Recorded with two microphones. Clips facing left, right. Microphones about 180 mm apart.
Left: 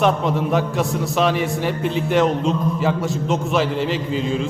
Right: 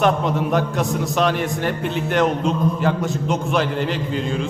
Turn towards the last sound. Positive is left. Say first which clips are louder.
# left 1 dB
turn(degrees=0)  # may be behind; listen again after turning